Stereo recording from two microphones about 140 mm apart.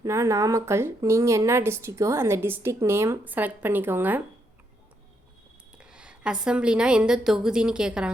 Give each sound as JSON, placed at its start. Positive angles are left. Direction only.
{"t": 0.0, "sound": "speech", "side_deg": -20}
{"t": 5.7, "sound": "a woman's voice", "side_deg": -5}